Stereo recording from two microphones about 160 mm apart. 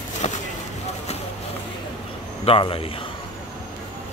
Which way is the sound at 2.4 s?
35° left (ahead or behind).